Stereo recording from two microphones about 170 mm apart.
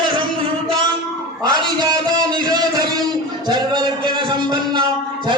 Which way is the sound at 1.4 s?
25° right (ahead or behind).